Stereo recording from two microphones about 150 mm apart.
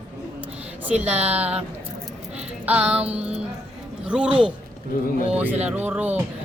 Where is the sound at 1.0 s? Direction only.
10° right (ahead or behind).